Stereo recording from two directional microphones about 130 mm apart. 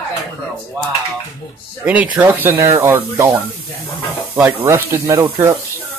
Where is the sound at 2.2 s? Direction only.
15° right (ahead or behind).